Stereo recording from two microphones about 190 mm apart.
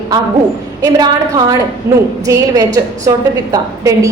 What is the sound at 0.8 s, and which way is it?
A woman's voice, 20° right (ahead or behind).